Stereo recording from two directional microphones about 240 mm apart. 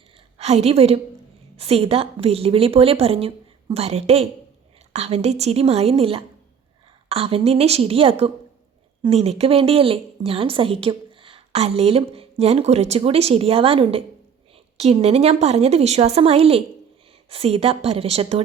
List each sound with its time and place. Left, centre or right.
0.3 s a woman's voice: right